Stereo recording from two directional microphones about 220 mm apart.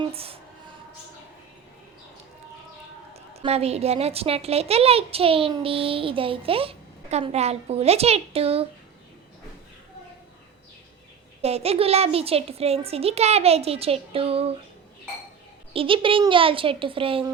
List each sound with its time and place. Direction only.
0.0 s a child's voice: 25° right (ahead or behind)
3.4 s a child's voice: 30° right (ahead or behind)
11.4 s a child's voice: 25° right (ahead or behind)
15.7 s a child's voice: 25° right (ahead or behind)